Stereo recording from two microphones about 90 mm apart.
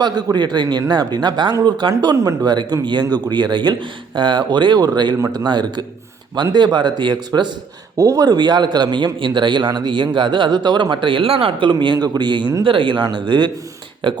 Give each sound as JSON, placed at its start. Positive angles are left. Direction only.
{"t": 0.0, "sound": "a man's voice", "side_deg": -50}
{"t": 7.9, "sound": "a man's voice", "side_deg": -40}
{"t": 12.6, "sound": "a man's voice", "side_deg": -65}